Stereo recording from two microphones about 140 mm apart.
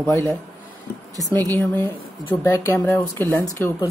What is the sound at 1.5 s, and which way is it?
Speech, 10° left (ahead or behind).